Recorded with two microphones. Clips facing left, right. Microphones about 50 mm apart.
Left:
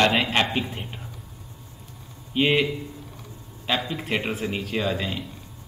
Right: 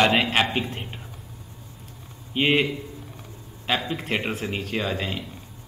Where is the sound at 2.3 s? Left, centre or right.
Centre.